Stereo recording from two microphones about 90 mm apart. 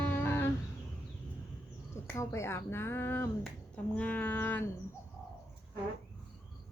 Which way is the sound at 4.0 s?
15° left (ahead or behind).